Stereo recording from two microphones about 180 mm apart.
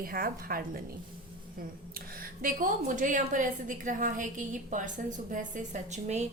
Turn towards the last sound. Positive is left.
turn(degrees=-40)  # may be behind; listen again after turning